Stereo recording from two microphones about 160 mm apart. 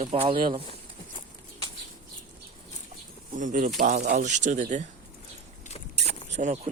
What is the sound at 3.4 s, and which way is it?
Speech, 50° right (ahead or behind).